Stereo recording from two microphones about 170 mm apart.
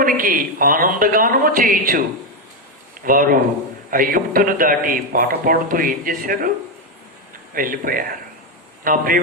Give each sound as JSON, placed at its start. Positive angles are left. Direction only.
{"t": 0.0, "sound": "a man's voice", "side_deg": -55}
{"t": 3.0, "sound": "a man's voice", "side_deg": -55}
{"t": 7.5, "sound": "a man's voice", "side_deg": -55}